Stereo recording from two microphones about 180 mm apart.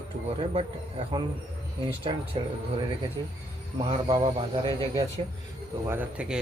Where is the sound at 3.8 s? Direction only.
25° right (ahead or behind).